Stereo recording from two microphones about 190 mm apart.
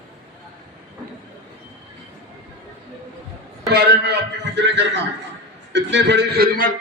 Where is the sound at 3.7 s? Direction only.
60° right (ahead or behind).